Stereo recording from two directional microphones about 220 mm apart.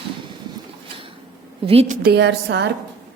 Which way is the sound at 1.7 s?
30° right (ahead or behind).